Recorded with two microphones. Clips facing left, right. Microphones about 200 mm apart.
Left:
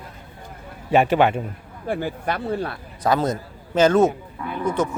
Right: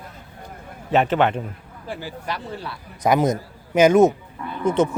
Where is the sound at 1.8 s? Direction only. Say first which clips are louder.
Left 6 dB; 55° left (ahead or behind).